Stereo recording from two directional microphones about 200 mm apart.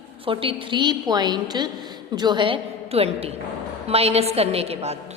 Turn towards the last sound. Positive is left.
turn(degrees=-30)  # may be behind; listen again after turning